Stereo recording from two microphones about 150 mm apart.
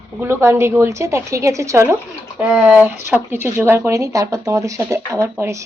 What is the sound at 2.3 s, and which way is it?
A woman's voice, 5° right (ahead or behind).